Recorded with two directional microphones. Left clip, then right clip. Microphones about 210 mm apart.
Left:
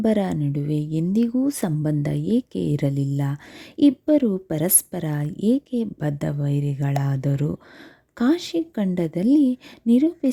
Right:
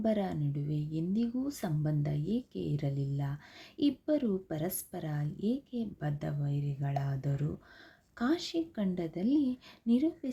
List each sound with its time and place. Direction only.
0.0 s a woman's voice: 50° left (ahead or behind)